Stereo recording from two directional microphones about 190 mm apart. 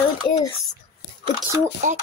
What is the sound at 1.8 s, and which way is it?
Speech, 40° right (ahead or behind).